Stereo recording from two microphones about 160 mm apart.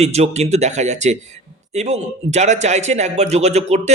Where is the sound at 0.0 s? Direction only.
40° right (ahead or behind).